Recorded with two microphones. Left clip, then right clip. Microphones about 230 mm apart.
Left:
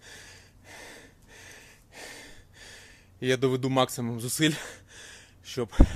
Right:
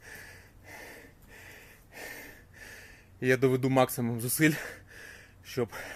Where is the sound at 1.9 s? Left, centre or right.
Centre.